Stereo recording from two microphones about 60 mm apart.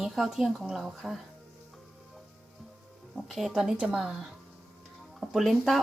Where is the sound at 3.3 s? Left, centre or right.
Centre.